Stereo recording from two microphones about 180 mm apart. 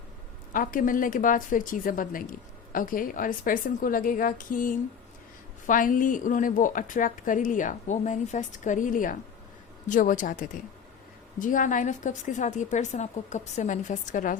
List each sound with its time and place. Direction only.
0.5 s a woman's voice: 50° left (ahead or behind)